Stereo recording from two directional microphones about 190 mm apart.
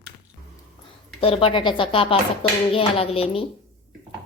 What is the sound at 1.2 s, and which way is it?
Speech, 30° left (ahead or behind).